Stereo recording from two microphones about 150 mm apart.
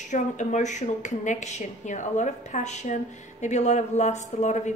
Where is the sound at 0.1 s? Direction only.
55° left (ahead or behind).